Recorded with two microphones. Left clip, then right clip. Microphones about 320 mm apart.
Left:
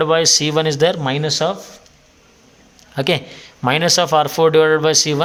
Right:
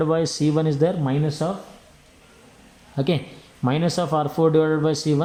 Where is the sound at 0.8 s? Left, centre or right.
Left.